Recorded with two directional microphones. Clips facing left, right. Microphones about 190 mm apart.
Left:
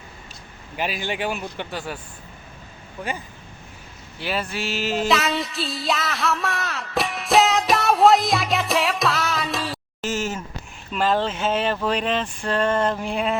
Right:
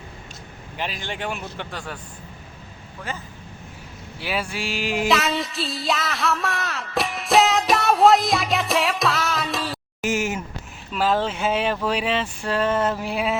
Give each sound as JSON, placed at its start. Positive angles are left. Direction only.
{"t": 0.8, "sound": "speech", "side_deg": 5}
{"t": 3.1, "sound": "speech", "side_deg": 15}
{"t": 4.2, "sound": "speech", "side_deg": -10}
{"t": 5.0, "sound": "music", "side_deg": 0}
{"t": 10.0, "sound": "a sound", "side_deg": -10}
{"t": 10.9, "sound": "speech", "side_deg": -5}